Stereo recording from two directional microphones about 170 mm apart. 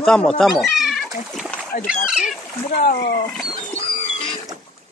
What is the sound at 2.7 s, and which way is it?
Speech, 65° left (ahead or behind).